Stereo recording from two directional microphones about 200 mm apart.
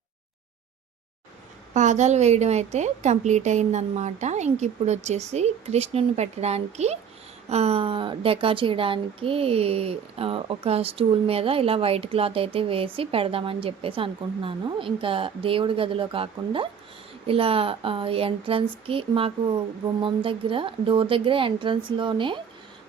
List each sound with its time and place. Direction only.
1.7 s a woman's voice: 35° right (ahead or behind)